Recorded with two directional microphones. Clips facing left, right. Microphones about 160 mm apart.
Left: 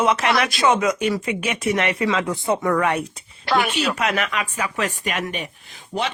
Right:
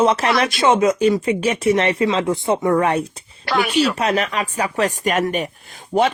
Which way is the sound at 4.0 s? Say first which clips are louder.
Right 3 dB; 30° right (ahead or behind).